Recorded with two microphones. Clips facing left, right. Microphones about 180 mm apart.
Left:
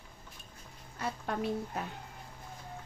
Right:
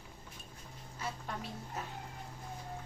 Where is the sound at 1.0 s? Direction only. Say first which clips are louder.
Left 7 dB; 60° left (ahead or behind).